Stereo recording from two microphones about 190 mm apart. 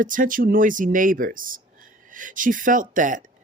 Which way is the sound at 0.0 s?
45° right (ahead or behind).